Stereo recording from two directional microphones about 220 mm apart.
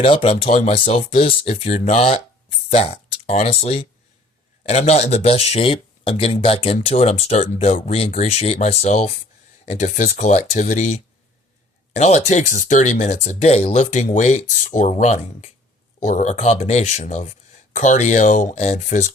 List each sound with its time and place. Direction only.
0.0 s speech: 25° left (ahead or behind)